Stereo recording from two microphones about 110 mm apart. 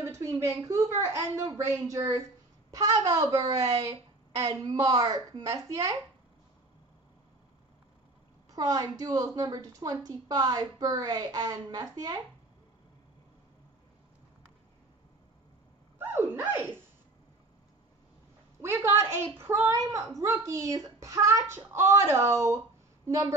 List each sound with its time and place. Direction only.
0.0 s a woman's voice: 25° right (ahead or behind)
4.7 s a woman's voice: 35° right (ahead or behind)
8.5 s a woman's voice: 35° right (ahead or behind)
16.0 s a sound: 20° right (ahead or behind)
18.6 s a woman's voice: 20° right (ahead or behind)